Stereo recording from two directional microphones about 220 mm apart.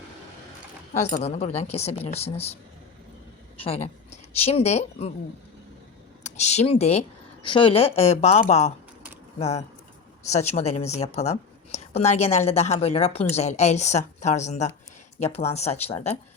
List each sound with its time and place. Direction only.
1.0 s a woman's voice: 30° left (ahead or behind)
3.6 s speech: 30° left (ahead or behind)
6.2 s a woman's voice: 30° left (ahead or behind)